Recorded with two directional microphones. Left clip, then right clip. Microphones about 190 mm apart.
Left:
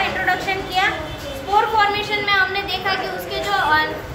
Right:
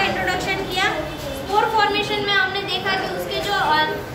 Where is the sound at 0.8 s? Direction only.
20° left (ahead or behind).